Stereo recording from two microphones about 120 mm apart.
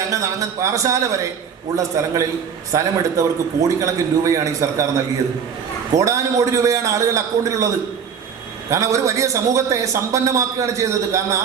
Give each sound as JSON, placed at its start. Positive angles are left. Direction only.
{"t": 0.1, "sound": "a man's voice", "side_deg": -25}
{"t": 5.9, "sound": "a man's voice", "side_deg": -25}
{"t": 8.7, "sound": "a man's voice", "side_deg": -25}